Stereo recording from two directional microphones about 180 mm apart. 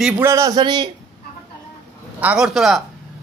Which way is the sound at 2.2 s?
5° right (ahead or behind).